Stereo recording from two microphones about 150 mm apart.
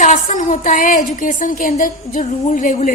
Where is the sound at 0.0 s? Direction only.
60° left (ahead or behind).